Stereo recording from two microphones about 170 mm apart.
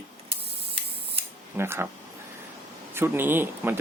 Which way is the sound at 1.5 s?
15° right (ahead or behind).